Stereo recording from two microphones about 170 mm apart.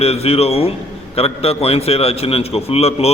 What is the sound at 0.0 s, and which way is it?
A man's voice, 35° left (ahead or behind).